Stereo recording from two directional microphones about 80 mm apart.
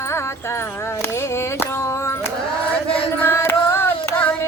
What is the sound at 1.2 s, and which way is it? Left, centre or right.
Music, left.